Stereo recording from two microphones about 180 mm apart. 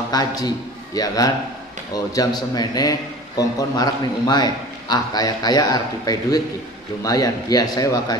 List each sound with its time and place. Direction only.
0.1 s a man's voice: 20° left (ahead or behind)